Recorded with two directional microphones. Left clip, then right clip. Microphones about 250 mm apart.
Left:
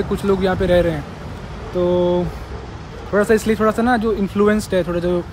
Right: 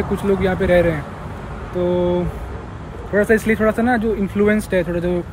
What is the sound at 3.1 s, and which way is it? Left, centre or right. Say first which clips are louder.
Speech: even; centre.